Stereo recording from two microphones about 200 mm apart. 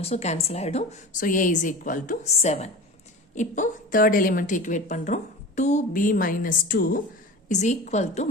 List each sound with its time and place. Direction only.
0.0 s a woman's voice: 30° left (ahead or behind)